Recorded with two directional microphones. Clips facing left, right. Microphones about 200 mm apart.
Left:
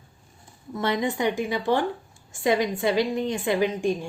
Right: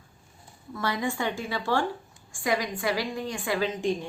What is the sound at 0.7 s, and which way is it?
A woman's voice, 20° left (ahead or behind).